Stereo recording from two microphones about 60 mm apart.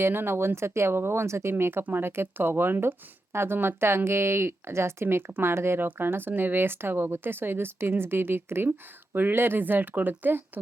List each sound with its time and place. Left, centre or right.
0.0 s speech: right